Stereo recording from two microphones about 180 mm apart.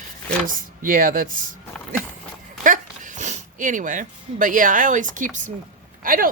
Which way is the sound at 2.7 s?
45° right (ahead or behind).